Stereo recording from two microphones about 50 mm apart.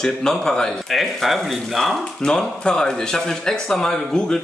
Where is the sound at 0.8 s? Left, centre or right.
Centre.